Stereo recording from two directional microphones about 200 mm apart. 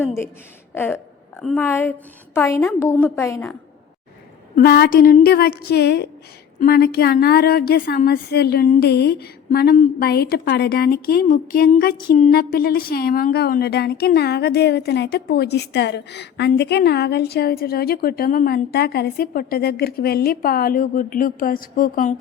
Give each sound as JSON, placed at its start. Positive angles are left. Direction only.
{"t": 0.7, "sound": "a woman's voice", "side_deg": 10}
{"t": 4.5, "sound": "a woman's voice", "side_deg": 50}